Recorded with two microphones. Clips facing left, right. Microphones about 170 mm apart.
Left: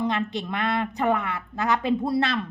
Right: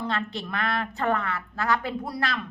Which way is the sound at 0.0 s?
20° left (ahead or behind).